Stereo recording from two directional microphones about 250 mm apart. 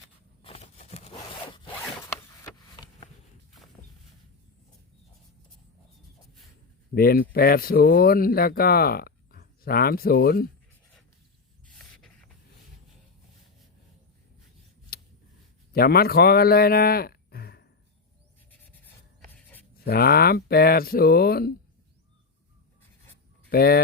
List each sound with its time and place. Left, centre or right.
0.4 s a sound: left
2.0 s a sound: centre
6.9 s speech: left
11.6 s a sound: centre
14.9 s scissors: left
15.7 s a man's voice: left
19.3 s writing: centre
19.8 s speech: left
23.5 s speech: left